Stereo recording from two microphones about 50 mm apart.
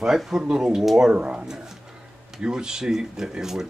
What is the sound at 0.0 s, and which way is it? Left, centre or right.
Speech, centre.